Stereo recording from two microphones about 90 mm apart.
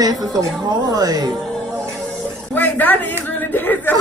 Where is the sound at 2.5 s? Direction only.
20° left (ahead or behind).